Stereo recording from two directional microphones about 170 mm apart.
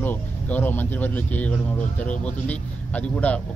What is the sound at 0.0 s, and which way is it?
Speech, 10° left (ahead or behind).